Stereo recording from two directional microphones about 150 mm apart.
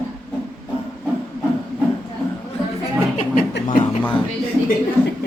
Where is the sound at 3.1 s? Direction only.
60° left (ahead or behind).